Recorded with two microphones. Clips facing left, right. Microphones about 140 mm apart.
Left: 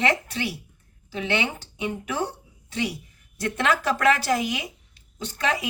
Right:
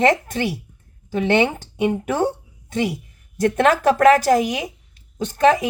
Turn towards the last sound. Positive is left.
turn(degrees=-45)  # may be behind; listen again after turning